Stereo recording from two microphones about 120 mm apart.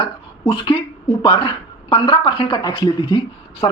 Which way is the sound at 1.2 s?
45° left (ahead or behind).